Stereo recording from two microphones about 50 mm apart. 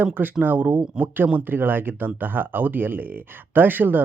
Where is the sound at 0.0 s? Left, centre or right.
Right.